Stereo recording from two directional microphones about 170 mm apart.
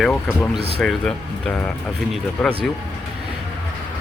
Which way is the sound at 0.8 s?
5° left (ahead or behind).